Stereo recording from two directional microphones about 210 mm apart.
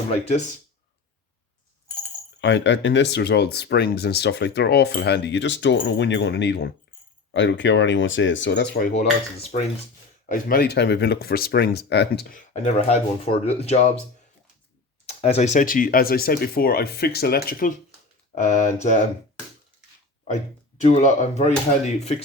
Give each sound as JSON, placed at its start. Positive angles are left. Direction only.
{"t": 2.4, "sound": "speech", "side_deg": 60}
{"t": 10.2, "sound": "speech", "side_deg": 45}
{"t": 12.6, "sound": "speech", "side_deg": 30}
{"t": 15.0, "sound": "speech", "side_deg": 30}
{"t": 20.8, "sound": "speech", "side_deg": 35}